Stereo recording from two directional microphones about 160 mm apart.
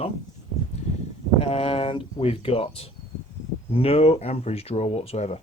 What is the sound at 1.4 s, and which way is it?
Speech, 35° left (ahead or behind).